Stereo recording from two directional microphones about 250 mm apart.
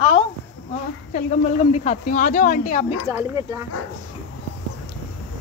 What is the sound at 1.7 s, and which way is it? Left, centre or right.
Speech, left.